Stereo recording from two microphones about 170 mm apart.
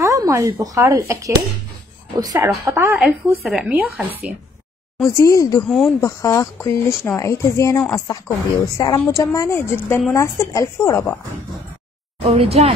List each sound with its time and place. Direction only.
0.0 s speech: 20° right (ahead or behind)
5.0 s speech: 20° left (ahead or behind)
5.7 s speech: centre (ahead or behind)
5.9 s speech: 20° left (ahead or behind)
12.2 s speech: 35° right (ahead or behind)